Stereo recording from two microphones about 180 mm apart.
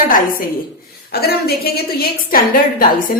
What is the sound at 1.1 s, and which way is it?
A woman's voice, 60° left (ahead or behind).